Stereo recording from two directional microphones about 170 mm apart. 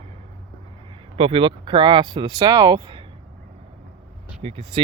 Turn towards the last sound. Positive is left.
turn(degrees=-35)  # may be behind; listen again after turning